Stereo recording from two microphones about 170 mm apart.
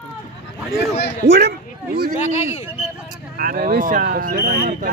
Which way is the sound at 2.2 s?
40° left (ahead or behind).